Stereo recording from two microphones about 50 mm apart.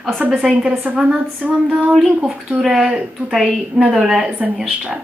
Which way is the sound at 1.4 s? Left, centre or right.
Right.